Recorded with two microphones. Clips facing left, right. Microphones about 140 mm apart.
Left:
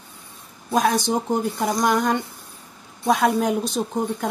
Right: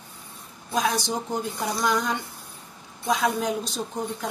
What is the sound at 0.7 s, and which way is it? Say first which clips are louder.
Speech: left 5 dB; 55° left (ahead or behind).